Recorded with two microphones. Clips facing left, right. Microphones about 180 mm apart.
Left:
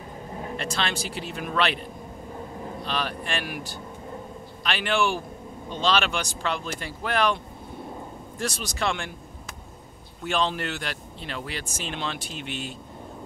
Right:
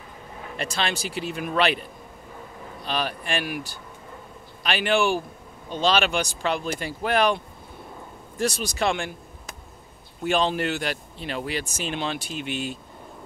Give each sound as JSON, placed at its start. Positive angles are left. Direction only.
{"t": 0.6, "sound": "speech", "side_deg": -10}
{"t": 2.8, "sound": "speech", "side_deg": -5}
{"t": 4.6, "sound": "speech", "side_deg": -10}
{"t": 8.4, "sound": "speech", "side_deg": -10}
{"t": 10.2, "sound": "speech", "side_deg": -10}